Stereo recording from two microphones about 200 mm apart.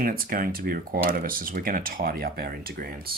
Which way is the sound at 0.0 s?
45° right (ahead or behind).